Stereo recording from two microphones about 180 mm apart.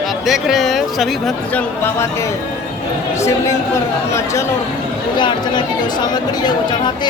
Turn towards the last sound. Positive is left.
turn(degrees=25)  # may be behind; listen again after turning